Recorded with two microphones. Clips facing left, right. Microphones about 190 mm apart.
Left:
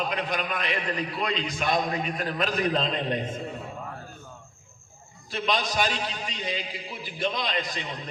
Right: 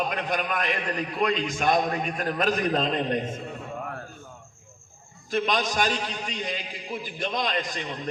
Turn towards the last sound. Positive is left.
turn(degrees=-45)  # may be behind; listen again after turning